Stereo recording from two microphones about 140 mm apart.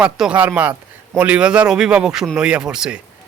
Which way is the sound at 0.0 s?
5° right (ahead or behind).